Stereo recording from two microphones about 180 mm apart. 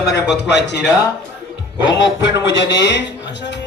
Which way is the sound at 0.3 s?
70° left (ahead or behind).